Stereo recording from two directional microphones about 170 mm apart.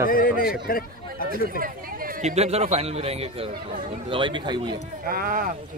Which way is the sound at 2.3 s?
40° right (ahead or behind).